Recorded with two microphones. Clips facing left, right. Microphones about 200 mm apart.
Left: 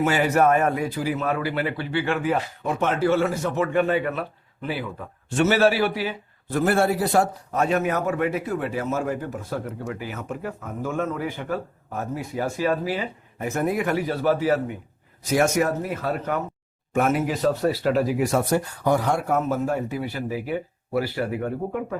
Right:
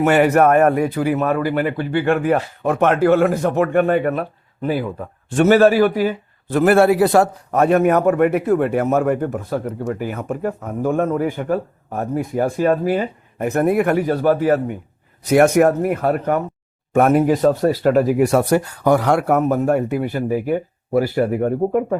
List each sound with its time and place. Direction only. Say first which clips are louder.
0.0 s speech: right 6 dB; 65° right (ahead or behind); by 6.1 s 45° right (ahead or behind)
6.5 s a man's voice: right 8 dB; 75° right (ahead or behind); by 14.8 s 50° right (ahead or behind)
15.2 s a man's voice: right 8 dB; 60° right (ahead or behind)
18.3 s speech: right 6 dB; 70° right (ahead or behind); by 21.9 s 45° right (ahead or behind)